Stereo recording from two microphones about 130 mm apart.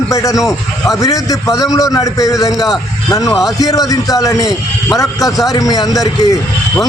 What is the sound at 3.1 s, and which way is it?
A man's voice, 25° left (ahead or behind).